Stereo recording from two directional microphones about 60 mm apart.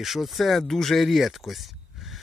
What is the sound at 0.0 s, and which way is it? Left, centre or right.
Speech, centre.